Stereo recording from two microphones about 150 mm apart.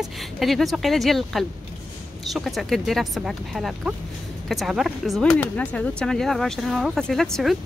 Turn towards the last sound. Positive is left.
turn(degrees=0)  # may be behind; listen again after turning